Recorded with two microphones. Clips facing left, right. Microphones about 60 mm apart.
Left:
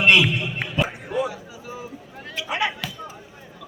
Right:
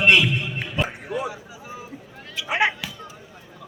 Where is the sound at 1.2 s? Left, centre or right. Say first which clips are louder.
Left 3 dB; centre.